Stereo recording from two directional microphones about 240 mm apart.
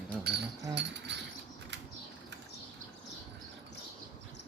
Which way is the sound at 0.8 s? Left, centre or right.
Right.